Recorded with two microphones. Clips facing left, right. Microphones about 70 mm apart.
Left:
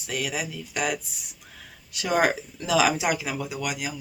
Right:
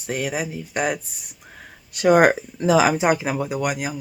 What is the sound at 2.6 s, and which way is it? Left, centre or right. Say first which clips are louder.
Speech: right 4 dB; right.